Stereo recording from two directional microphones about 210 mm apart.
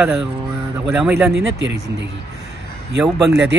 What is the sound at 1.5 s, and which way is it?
Speech, 55° right (ahead or behind).